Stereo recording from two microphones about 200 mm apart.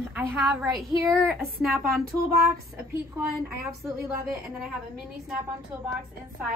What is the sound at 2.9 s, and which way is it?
A woman's voice, 15° right (ahead or behind).